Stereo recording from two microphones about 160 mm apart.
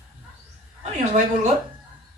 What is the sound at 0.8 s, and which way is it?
Speech, 45° right (ahead or behind).